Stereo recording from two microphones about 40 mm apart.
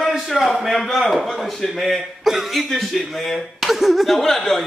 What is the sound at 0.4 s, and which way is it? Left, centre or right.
A man's voice, centre.